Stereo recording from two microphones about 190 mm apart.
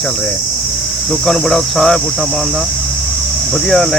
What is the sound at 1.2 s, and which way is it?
Speech, centre (ahead or behind).